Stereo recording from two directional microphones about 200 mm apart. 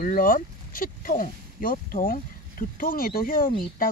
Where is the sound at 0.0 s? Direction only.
45° left (ahead or behind).